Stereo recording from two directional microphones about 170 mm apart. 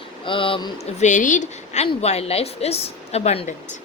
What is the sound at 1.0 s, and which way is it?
A woman's voice, 45° left (ahead or behind).